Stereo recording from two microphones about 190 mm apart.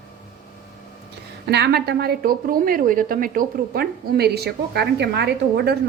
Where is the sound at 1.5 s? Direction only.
60° right (ahead or behind).